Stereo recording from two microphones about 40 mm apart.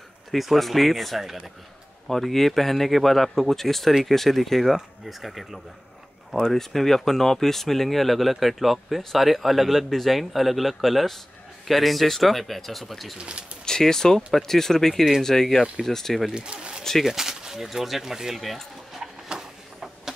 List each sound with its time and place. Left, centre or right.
0.3 s speech: centre
6.3 s speech: centre
13.2 s speech: right
13.7 s speech: centre
16.3 s speech: right
17.0 s speech: centre
19.0 s a sound: centre